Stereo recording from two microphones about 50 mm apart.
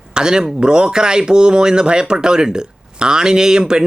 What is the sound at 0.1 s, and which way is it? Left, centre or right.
Speech, centre.